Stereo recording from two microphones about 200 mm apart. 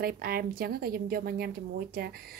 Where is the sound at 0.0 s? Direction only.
50° right (ahead or behind).